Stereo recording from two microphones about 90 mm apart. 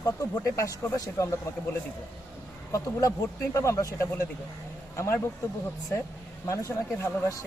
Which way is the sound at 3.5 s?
35° left (ahead or behind).